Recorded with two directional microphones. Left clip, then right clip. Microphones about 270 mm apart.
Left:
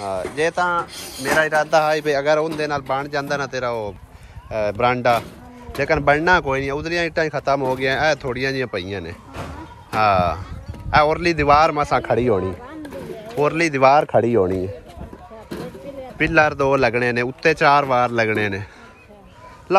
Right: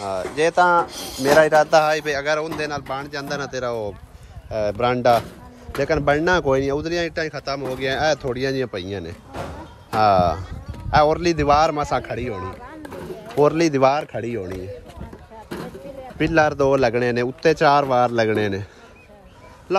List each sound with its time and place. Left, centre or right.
0.0 s speech: centre
0.8 s speech: right
9.3 s music: right
9.9 s speech: centre
12.0 s a man's voice: centre
12.8 s a sound: centre
13.4 s speech: centre
16.2 s speech: centre